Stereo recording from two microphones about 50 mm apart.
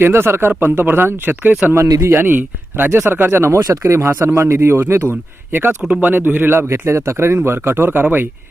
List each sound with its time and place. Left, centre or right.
0.0 s speech: right
1.7 s a man's voice: right
2.1 s speech: right
3.4 s a man's voice: right
5.5 s a man's voice: right
6.7 s a man's voice: right